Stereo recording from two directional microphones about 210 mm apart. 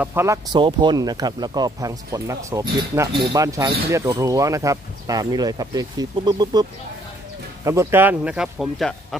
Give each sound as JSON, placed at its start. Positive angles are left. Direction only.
{"t": 0.0, "sound": "speech", "side_deg": -10}